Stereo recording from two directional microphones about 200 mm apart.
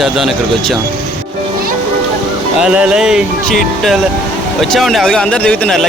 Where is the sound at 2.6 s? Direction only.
5° right (ahead or behind).